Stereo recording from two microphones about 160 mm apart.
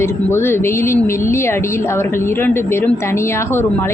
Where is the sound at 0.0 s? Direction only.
15° left (ahead or behind).